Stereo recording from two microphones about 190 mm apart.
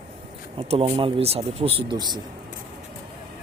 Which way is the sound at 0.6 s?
30° right (ahead or behind).